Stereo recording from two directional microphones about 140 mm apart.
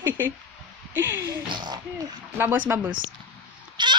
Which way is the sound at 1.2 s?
30° right (ahead or behind).